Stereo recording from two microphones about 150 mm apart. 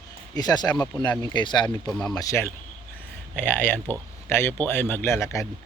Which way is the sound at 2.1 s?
20° left (ahead or behind).